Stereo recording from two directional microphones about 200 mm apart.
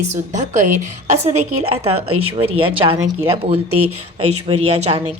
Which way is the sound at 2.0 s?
90° right.